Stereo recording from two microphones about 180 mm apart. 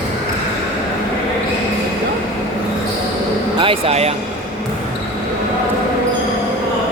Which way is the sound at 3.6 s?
30° right (ahead or behind).